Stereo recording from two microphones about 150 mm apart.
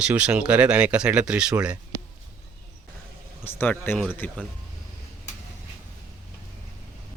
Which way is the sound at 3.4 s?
15° left (ahead or behind).